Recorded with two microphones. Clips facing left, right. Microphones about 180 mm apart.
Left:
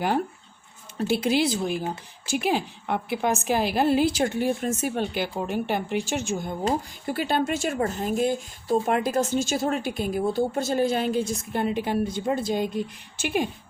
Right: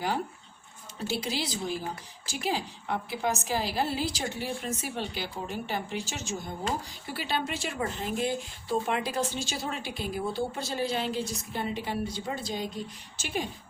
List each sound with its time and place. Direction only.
0.9 s a woman's voice: 55° left (ahead or behind)